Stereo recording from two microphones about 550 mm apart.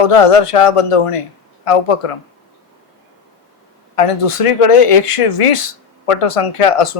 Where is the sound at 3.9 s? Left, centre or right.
Left.